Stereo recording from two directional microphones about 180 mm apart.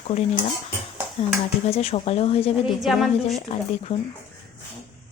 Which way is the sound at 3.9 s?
30° left (ahead or behind).